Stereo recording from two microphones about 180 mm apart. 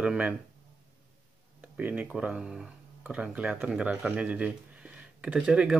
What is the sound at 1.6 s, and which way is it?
Speech, 5° right (ahead or behind).